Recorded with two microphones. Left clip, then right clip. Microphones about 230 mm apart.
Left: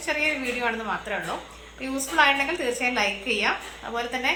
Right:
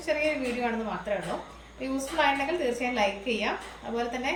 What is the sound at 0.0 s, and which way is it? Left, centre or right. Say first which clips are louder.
Speech: left 2 dB; centre.